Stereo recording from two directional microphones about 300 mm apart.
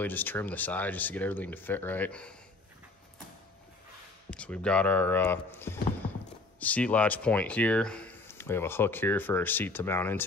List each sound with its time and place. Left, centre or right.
0.0 s speech: centre
4.3 s speech: centre
6.0 s a sound: centre
6.6 s speech: centre